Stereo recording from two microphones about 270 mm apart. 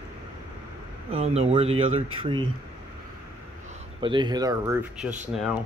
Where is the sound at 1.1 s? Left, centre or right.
Right.